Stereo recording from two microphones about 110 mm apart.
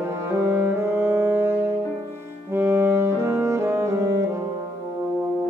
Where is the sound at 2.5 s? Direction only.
20° right (ahead or behind).